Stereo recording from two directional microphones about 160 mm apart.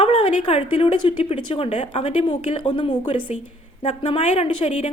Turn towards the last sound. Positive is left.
turn(degrees=45)  # may be behind; listen again after turning